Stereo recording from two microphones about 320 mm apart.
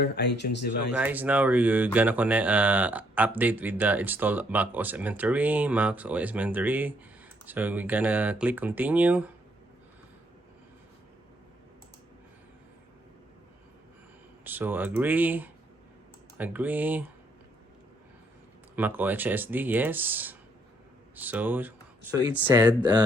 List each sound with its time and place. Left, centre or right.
0.0 s speech: left
0.9 s speech: centre
14.4 s speech: centre
18.8 s speech: centre